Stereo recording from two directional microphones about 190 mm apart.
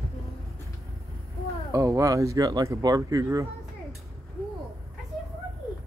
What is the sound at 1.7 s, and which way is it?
Speech, 15° right (ahead or behind).